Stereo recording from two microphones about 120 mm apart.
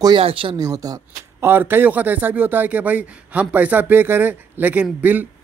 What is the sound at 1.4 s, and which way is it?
A man's voice, 20° right (ahead or behind).